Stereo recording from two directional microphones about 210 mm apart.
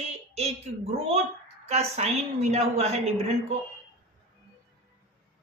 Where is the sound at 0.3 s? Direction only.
30° right (ahead or behind).